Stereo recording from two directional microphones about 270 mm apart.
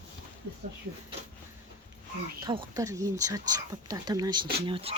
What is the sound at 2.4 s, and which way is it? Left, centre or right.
Speech, centre.